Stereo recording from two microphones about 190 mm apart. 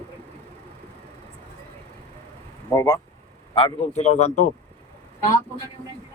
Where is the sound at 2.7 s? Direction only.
20° left (ahead or behind).